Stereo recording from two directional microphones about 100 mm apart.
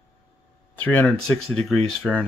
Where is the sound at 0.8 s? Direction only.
15° left (ahead or behind).